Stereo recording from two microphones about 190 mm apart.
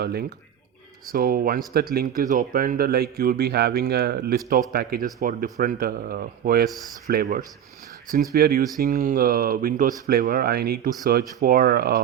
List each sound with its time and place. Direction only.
0.0 s speech: 55° right (ahead or behind)